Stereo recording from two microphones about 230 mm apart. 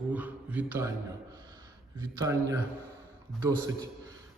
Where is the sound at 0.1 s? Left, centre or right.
Centre.